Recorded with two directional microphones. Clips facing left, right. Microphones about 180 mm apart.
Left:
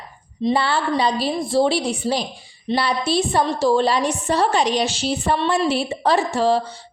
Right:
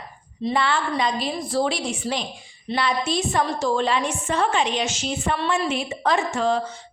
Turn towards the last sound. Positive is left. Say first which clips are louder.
# left 4 dB
turn(degrees=35)  # may be behind; listen again after turning